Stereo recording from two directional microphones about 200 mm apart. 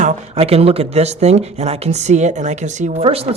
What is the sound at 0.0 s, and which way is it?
Speech, 35° right (ahead or behind).